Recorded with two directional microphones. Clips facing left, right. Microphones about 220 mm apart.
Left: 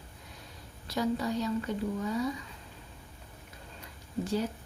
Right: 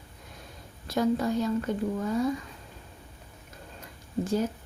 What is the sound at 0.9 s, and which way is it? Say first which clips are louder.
Speech: right 5 dB; 50° right (ahead or behind).